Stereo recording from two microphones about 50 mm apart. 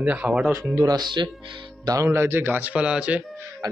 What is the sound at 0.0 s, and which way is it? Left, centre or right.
Speech, right.